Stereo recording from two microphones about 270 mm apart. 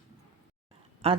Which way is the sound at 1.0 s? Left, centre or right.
Right.